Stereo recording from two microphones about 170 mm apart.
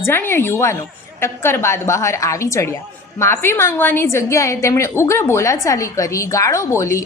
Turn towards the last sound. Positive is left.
turn(degrees=15)  # may be behind; listen again after turning